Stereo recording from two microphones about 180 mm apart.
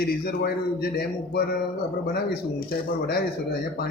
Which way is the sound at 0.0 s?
60° left (ahead or behind).